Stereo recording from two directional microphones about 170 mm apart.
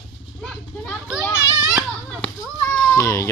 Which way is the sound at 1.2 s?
15° left (ahead or behind).